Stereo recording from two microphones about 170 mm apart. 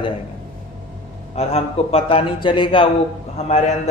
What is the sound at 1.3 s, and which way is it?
Speech, 40° left (ahead or behind).